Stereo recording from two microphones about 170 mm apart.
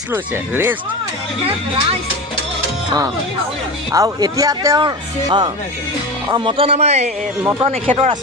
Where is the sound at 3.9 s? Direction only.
20° right (ahead or behind).